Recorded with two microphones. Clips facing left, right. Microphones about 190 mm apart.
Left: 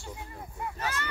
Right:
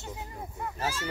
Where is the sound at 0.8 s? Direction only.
60° left (ahead or behind).